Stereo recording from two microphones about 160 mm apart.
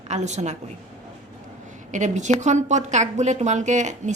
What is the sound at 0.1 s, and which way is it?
Speech, 45° right (ahead or behind).